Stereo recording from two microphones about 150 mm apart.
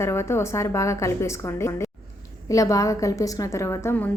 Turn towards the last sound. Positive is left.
turn(degrees=15)  # may be behind; listen again after turning